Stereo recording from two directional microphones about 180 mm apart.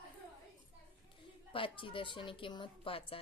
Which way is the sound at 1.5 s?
30° left (ahead or behind).